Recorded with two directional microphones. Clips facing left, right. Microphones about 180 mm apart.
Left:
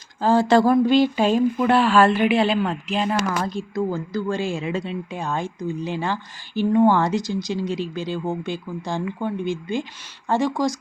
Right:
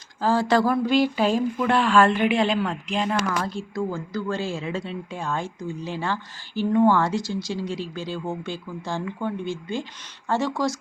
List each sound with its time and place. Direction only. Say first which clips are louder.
0.2 s speech: left 4 dB; 25° left (ahead or behind)
1.7 s speech: left 1 dB; 5° left (ahead or behind)
3.1 s speech: left 2 dB; 20° left (ahead or behind)